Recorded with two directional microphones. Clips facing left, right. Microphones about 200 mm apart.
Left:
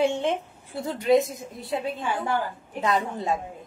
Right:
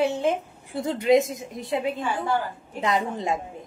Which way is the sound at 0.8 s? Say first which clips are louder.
Right 1 dB; 20° right (ahead or behind).